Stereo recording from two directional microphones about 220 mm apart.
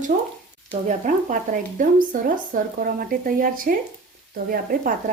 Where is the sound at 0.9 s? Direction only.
35° right (ahead or behind).